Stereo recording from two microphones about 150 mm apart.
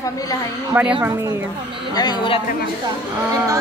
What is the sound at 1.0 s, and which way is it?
Speech, 20° right (ahead or behind).